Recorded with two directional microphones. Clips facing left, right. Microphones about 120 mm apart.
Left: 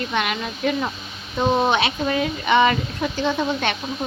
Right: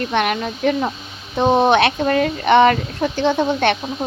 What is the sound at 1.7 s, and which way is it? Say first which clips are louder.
Speech: right 6 dB; 55° right (ahead or behind).